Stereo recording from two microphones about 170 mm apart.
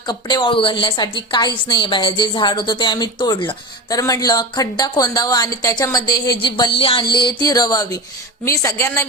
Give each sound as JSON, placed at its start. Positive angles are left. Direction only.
{"t": 0.1, "sound": "a woman's voice", "side_deg": 25}